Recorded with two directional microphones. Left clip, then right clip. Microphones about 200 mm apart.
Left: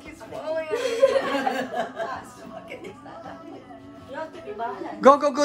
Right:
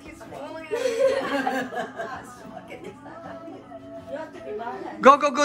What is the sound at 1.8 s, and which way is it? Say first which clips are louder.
Music: left 3 dB; centre (ahead or behind).